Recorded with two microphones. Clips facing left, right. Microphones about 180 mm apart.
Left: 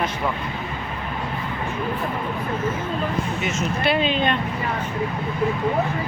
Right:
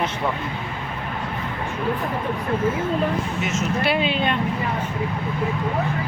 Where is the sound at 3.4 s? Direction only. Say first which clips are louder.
Right 1 dB; 5° right (ahead or behind).